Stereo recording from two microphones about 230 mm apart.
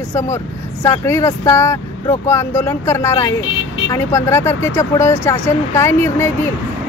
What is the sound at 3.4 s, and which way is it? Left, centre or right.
Speech, left.